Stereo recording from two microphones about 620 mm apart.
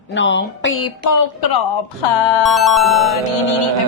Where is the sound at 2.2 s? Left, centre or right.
Left.